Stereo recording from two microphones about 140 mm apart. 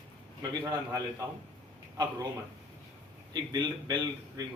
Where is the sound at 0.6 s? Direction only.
25° right (ahead or behind).